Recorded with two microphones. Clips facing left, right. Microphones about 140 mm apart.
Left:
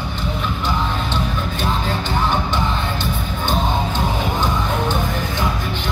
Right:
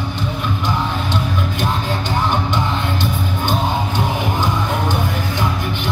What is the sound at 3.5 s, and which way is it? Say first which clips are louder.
Music: left 1 dB; 15° right (ahead or behind).